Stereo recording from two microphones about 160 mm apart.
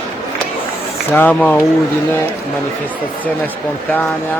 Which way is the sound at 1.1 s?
10° left (ahead or behind).